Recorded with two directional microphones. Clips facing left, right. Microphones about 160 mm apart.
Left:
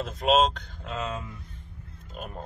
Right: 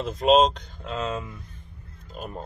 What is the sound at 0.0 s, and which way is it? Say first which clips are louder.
Speech: right 4 dB; centre (ahead or behind).